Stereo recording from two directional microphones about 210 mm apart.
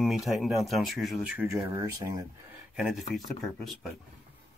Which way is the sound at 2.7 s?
5° right (ahead or behind).